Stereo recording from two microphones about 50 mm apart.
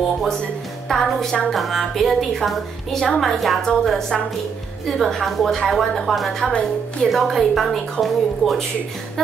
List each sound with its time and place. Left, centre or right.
0.8 s a woman's voice: centre
6.4 s a woman's voice: left
7.1 s a woman's voice: centre